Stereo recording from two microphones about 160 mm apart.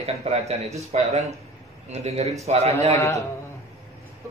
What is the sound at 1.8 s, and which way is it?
A man's voice, 40° right (ahead or behind).